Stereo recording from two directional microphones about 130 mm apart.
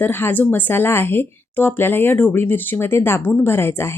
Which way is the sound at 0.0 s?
15° left (ahead or behind).